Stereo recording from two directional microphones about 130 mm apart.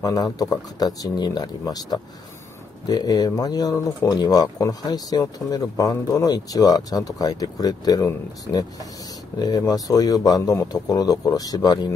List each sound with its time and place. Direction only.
0.0 s speech: 30° left (ahead or behind)